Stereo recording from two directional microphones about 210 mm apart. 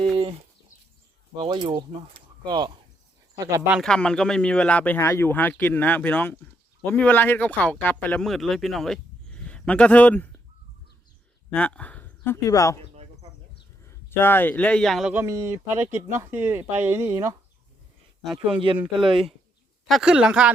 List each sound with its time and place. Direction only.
1.4 s speech: 20° right (ahead or behind)
3.8 s speech: 5° left (ahead or behind)
11.5 s speech: 5° left (ahead or behind)
13.8 s speech: 10° left (ahead or behind); by 17.3 s 10° right (ahead or behind)
19.0 s speech: 25° right (ahead or behind)
19.9 s speech: 5° right (ahead or behind)